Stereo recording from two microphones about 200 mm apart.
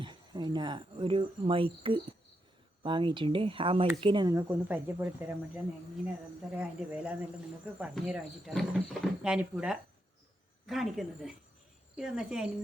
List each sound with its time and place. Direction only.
0.0 s speech: 20° right (ahead or behind)
6.5 s speech: 5° right (ahead or behind)